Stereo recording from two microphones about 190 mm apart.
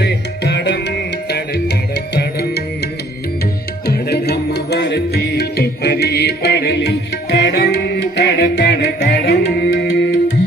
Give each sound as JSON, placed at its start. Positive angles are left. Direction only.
{"t": 0.0, "sound": "music", "side_deg": 60}
{"t": 3.8, "sound": "music", "side_deg": 60}